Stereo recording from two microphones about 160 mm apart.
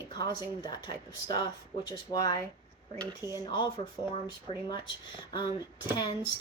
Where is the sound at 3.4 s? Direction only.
30° left (ahead or behind).